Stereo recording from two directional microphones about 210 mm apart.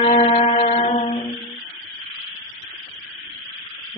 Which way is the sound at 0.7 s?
30° left (ahead or behind).